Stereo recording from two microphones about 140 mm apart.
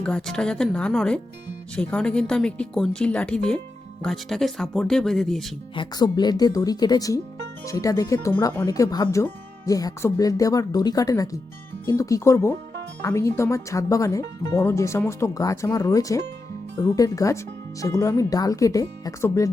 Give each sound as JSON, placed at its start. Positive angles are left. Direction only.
{"t": 0.0, "sound": "speech", "side_deg": 5}
{"t": 5.7, "sound": "speech", "side_deg": 30}